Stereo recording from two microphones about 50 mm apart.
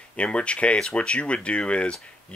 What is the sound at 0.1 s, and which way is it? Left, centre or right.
Speech, left.